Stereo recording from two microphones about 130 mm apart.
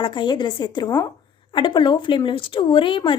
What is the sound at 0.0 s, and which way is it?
A woman's voice, 35° left (ahead or behind).